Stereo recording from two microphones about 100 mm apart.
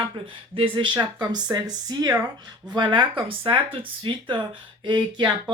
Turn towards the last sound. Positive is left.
turn(degrees=-50)  # may be behind; listen again after turning